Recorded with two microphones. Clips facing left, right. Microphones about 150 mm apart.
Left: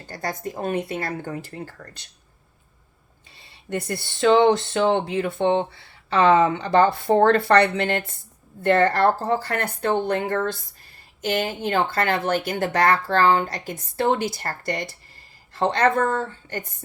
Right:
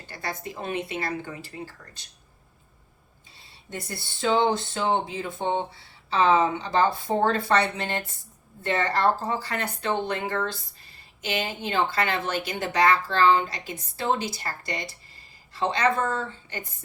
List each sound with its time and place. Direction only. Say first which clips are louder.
0.1 s speech: left 5 dB; 45° left (ahead or behind)
3.7 s speech: left 8 dB; 75° left (ahead or behind)
8.6 s speech: left 6 dB; 55° left (ahead or behind)